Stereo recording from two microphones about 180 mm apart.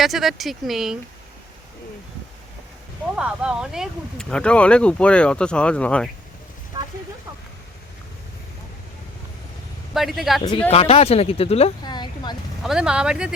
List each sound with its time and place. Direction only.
0.0 s speech: centre (ahead or behind)
3.2 s speech: 5° right (ahead or behind)
9.9 s speech: centre (ahead or behind)
10.7 s speech: 35° left (ahead or behind)
12.6 s speech: 5° right (ahead or behind)